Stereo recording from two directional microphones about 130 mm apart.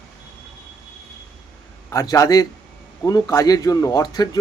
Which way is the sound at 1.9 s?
25° left (ahead or behind).